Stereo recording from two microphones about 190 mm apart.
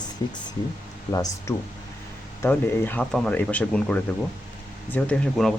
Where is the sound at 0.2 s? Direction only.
20° left (ahead or behind).